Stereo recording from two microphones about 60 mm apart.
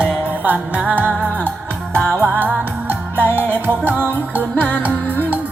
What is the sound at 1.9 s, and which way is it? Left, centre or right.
Music, left.